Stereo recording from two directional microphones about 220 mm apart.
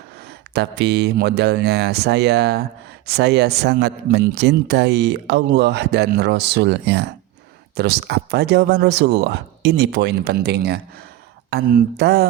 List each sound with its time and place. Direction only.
0.3 s a man's voice: 50° right (ahead or behind)